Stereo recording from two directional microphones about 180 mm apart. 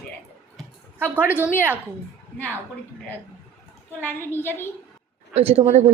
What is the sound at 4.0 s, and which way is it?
Speech, 10° left (ahead or behind).